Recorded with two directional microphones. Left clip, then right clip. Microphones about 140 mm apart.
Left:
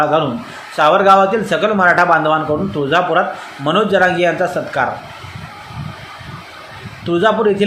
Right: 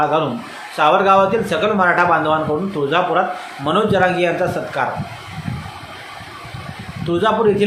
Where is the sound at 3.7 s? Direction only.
20° left (ahead or behind).